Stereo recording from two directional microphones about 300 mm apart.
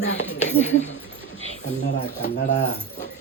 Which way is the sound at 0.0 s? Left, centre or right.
Left.